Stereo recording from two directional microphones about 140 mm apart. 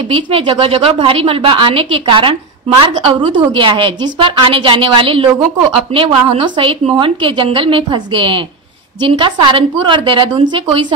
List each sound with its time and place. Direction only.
0.1 s a woman's voice: 40° right (ahead or behind)